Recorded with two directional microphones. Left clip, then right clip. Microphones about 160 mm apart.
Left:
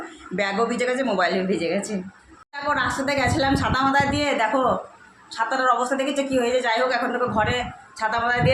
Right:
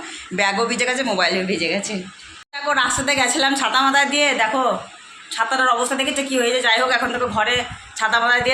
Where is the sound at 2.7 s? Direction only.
Centre (ahead or behind).